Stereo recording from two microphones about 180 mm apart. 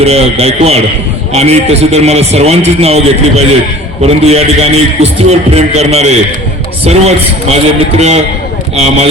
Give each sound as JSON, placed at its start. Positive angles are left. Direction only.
{"t": 0.0, "sound": "a man's voice", "side_deg": -35}